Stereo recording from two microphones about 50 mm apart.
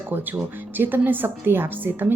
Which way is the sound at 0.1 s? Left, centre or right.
Right.